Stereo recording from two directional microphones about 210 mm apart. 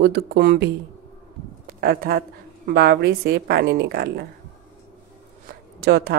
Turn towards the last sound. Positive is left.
turn(degrees=-50)  # may be behind; listen again after turning